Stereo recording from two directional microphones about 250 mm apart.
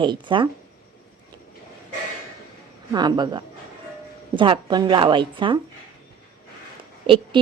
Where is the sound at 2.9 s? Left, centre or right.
Centre.